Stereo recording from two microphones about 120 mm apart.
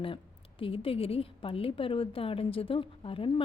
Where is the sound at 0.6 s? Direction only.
50° left (ahead or behind).